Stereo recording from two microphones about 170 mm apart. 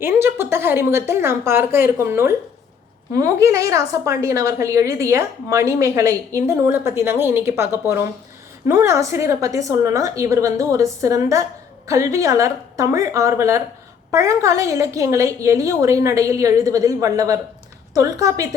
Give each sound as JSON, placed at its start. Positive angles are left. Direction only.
{"t": 0.0, "sound": "a woman's voice", "side_deg": -15}